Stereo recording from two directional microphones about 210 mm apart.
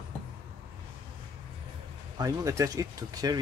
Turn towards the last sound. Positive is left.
turn(degrees=-20)  # may be behind; listen again after turning